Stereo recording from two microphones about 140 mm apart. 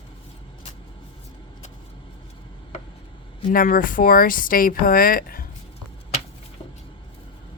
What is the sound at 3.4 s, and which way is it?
Speech, 85° left.